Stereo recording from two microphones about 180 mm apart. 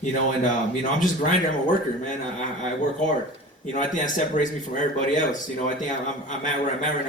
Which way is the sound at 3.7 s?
45° left (ahead or behind).